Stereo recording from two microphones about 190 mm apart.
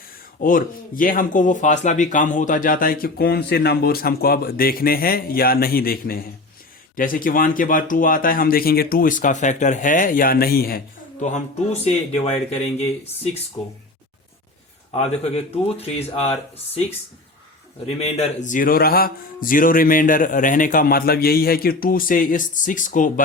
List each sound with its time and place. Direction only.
0.3 s speech: 45° left (ahead or behind); by 13.7 s 30° left (ahead or behind)
14.9 s speech: 35° left (ahead or behind)
17.8 s speech: 35° left (ahead or behind)